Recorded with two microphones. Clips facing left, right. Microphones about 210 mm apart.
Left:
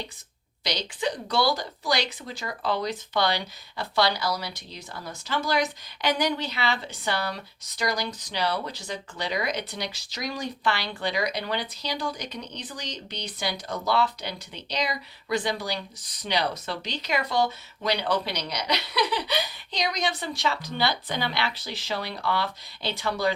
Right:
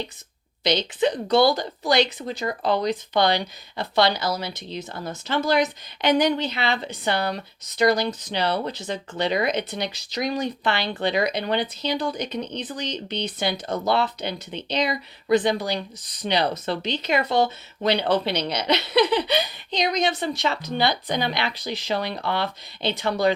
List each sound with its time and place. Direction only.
0.6 s speech: 25° right (ahead or behind)